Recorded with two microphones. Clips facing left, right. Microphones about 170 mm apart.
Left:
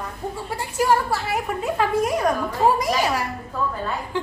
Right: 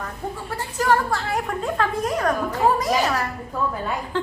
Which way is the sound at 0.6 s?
10° left (ahead or behind).